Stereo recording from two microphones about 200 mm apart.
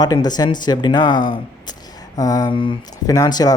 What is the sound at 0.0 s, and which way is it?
Speech, 20° left (ahead or behind).